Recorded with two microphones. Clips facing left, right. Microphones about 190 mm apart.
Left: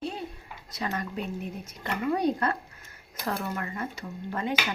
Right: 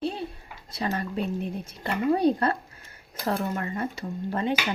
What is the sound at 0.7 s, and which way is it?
Speech, 30° right (ahead or behind).